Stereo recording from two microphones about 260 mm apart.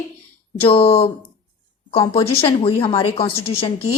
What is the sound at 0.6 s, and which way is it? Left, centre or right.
A woman's voice, left.